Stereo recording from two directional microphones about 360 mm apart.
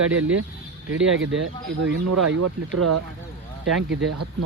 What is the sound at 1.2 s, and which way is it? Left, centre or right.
Speech, right.